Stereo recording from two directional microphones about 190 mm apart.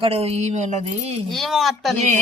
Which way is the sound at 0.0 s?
30° right (ahead or behind).